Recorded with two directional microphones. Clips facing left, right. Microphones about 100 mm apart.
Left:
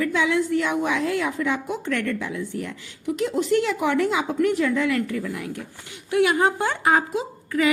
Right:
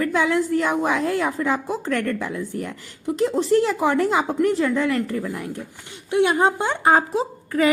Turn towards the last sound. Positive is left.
turn(degrees=-35)  # may be behind; listen again after turning